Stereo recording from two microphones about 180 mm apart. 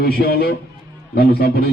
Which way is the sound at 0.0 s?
55° left (ahead or behind).